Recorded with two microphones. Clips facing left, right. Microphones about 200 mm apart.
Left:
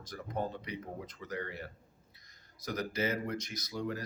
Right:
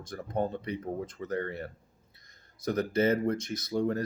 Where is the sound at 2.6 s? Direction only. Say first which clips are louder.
Right 8 dB; 30° right (ahead or behind).